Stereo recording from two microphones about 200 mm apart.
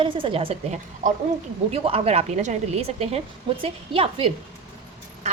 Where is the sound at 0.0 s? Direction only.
25° right (ahead or behind).